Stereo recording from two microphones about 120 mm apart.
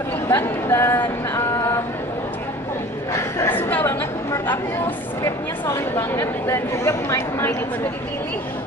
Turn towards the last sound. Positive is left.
turn(degrees=25)  # may be behind; listen again after turning